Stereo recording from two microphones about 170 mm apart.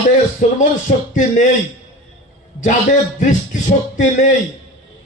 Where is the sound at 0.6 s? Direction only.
45° left (ahead or behind).